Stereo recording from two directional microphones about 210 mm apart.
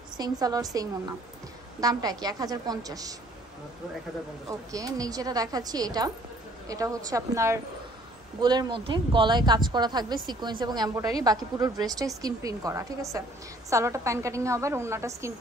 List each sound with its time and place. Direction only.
0.2 s a woman's voice: 20° right (ahead or behind)
4.5 s a woman's voice: 15° right (ahead or behind)